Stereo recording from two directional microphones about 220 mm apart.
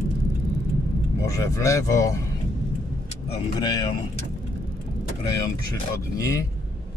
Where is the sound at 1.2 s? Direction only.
15° left (ahead or behind).